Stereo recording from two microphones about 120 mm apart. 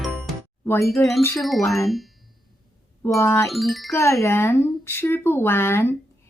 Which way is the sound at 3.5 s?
Centre (ahead or behind).